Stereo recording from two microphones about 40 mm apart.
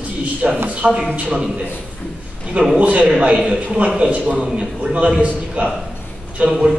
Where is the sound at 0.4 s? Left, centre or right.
Right.